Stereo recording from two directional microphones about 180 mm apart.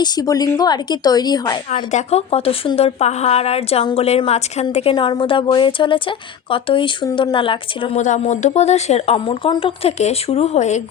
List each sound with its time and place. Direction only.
0.0 s a woman's voice: 20° left (ahead or behind)
1.7 s a woman's voice: 40° left (ahead or behind)
8.0 s a woman's voice: 40° left (ahead or behind)